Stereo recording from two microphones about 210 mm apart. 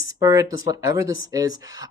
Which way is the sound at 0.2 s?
15° right (ahead or behind).